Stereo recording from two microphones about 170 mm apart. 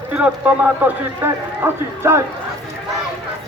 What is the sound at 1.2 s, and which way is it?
Speech, 15° right (ahead or behind).